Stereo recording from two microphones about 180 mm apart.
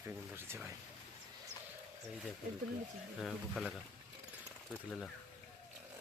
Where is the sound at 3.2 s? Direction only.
Centre (ahead or behind).